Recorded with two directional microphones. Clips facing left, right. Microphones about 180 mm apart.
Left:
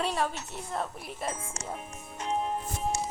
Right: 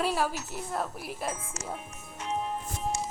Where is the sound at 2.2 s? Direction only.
35° left (ahead or behind).